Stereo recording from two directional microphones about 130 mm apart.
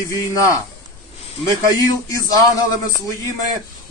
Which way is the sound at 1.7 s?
25° left (ahead or behind).